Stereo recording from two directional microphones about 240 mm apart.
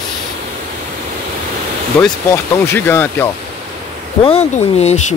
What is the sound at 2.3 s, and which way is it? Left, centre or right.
Speech, centre.